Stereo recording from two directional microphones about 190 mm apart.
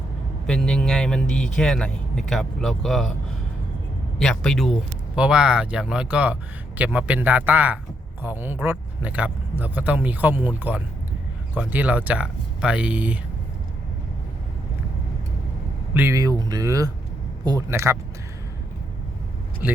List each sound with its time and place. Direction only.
0.4 s speech: 5° left (ahead or behind)
4.2 s speech: centre (ahead or behind)
16.0 s speech: 15° right (ahead or behind)